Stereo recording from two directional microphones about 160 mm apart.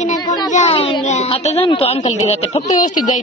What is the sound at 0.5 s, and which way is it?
Speech, 40° left (ahead or behind).